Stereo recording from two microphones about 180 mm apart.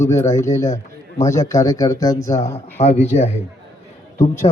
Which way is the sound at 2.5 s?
35° left (ahead or behind).